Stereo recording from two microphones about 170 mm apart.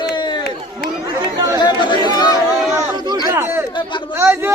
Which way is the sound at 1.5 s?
25° left (ahead or behind).